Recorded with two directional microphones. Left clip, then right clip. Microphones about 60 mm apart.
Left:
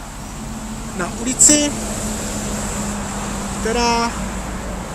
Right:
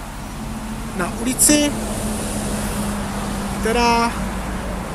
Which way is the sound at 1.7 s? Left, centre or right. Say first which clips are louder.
Even; centre.